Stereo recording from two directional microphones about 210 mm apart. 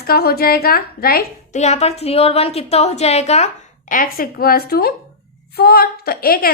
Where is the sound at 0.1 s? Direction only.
45° left (ahead or behind).